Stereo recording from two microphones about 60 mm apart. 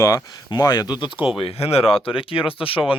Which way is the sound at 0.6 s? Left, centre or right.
Left.